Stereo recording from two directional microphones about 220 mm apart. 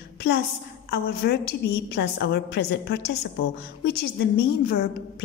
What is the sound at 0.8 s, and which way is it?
A woman's voice, 45° left (ahead or behind).